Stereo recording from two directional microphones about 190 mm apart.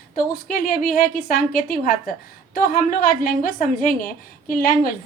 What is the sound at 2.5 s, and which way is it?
A woman's voice, 50° left (ahead or behind).